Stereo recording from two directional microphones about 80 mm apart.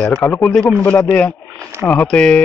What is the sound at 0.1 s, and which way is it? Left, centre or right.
Speech, left.